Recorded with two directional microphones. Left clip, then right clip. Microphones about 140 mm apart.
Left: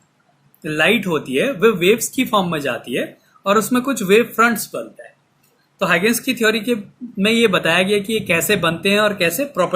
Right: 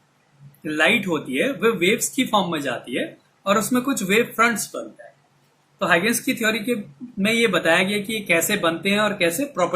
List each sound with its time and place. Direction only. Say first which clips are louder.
0.6 s speech: left 3 dB; 80° left; by 4.8 s 60° left (ahead or behind)
5.8 s speech: left 3 dB; 85° left